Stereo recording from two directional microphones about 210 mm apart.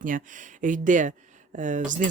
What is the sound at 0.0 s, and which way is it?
Speech, 40° right (ahead or behind).